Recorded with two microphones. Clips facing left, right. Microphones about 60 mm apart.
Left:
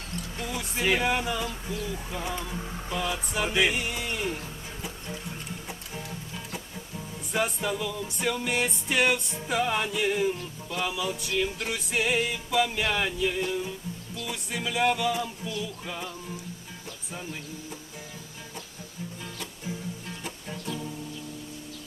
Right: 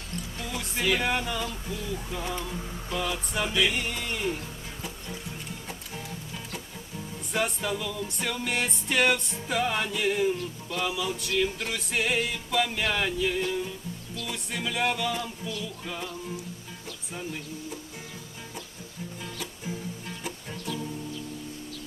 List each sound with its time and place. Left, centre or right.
0.3 s music: centre
0.8 s music: centre
1.0 s music: centre
5.6 s music: centre